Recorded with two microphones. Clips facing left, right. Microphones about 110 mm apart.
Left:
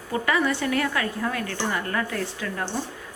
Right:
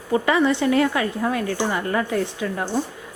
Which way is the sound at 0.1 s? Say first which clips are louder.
Right 5 dB; 25° right (ahead or behind).